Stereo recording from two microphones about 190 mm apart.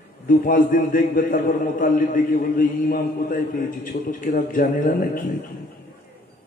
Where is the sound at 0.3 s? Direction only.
45° left (ahead or behind).